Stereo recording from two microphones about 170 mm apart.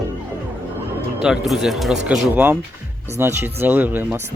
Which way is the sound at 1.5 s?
Centre (ahead or behind).